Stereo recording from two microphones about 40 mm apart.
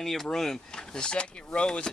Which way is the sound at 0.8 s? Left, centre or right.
Left.